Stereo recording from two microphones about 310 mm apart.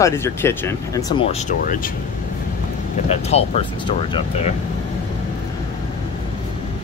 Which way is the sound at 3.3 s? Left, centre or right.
Centre.